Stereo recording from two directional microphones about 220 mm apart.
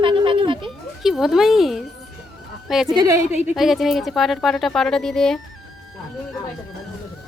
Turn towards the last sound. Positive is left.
turn(degrees=0)  # may be behind; listen again after turning